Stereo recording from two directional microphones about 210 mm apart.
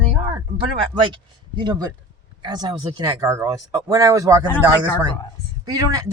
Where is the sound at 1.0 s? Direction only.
20° right (ahead or behind).